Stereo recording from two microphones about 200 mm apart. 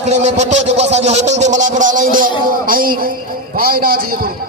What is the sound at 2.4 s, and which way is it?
A man's voice, 45° right (ahead or behind).